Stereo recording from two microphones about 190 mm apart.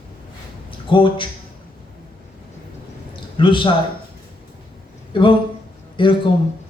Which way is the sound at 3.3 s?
25° left (ahead or behind).